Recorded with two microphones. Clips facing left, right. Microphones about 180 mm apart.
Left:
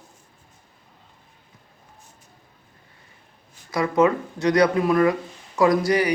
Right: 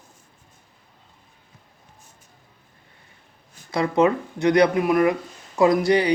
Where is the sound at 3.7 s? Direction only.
20° right (ahead or behind).